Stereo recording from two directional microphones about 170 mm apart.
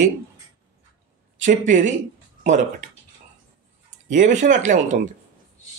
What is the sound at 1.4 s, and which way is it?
Speech, 45° right (ahead or behind).